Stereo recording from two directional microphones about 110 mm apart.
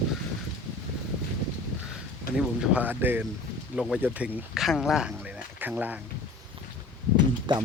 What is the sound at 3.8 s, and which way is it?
Speech, 5° right (ahead or behind).